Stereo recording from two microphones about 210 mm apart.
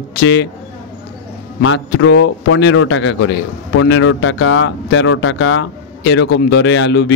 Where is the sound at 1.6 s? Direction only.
60° left (ahead or behind).